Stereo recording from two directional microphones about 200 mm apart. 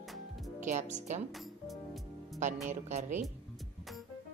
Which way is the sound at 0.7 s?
35° right (ahead or behind).